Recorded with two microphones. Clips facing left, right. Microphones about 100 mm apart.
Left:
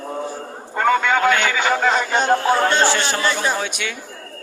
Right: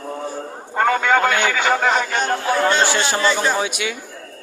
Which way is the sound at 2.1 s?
25° left (ahead or behind).